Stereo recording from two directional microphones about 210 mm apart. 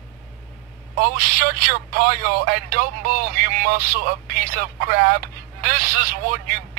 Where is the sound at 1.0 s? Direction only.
45° right (ahead or behind).